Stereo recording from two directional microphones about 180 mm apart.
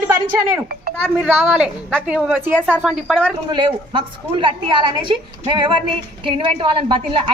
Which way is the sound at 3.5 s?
25° right (ahead or behind).